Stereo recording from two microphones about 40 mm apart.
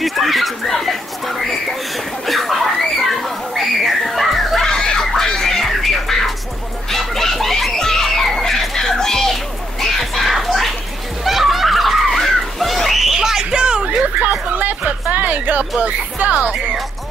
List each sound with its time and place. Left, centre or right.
0.0 s a sound: centre
4.6 s music: centre
6.9 s chicken: centre
9.3 s children playing: centre
11.2 s a sound: centre; by 13.8 s right
14.8 s music: right
15.8 s speech: right